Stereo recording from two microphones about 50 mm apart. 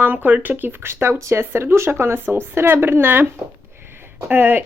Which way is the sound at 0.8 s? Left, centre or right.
Right.